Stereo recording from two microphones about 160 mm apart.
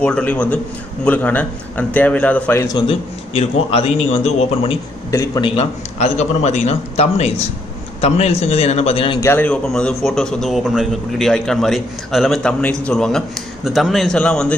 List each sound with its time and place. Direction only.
0.0 s a man's voice: 10° left (ahead or behind)
2.9 s a man's voice: 40° left (ahead or behind)
5.1 s a man's voice: 20° left (ahead or behind)
5.6 s a man's voice: 45° left (ahead or behind)
9.2 s a man's voice: 15° left (ahead or behind)